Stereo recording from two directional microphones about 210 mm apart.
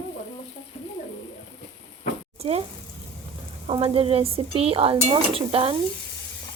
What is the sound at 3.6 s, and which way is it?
Sizzle, 25° right (ahead or behind).